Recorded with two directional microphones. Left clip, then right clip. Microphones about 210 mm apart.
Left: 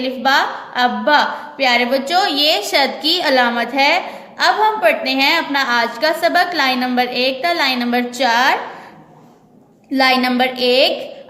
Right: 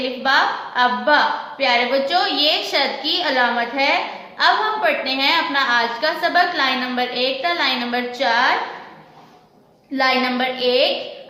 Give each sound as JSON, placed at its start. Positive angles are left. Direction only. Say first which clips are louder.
{"t": 0.2, "sound": "a woman's voice", "louder": "left 2 dB", "side_deg": 50}
{"t": 9.9, "sound": "a woman's voice", "louder": "left 4 dB", "side_deg": 50}